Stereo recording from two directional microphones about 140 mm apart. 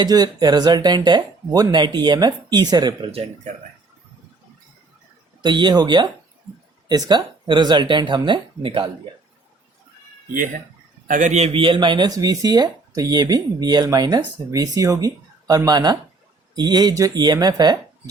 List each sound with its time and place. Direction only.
0.0 s speech: 30° right (ahead or behind)
3.1 s speech: 45° right (ahead or behind)
5.4 s speech: 35° right (ahead or behind)
11.1 s speech: 60° right (ahead or behind); by 18.1 s 30° right (ahead or behind)